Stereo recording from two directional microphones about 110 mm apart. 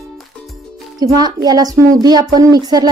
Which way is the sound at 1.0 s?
35° right (ahead or behind).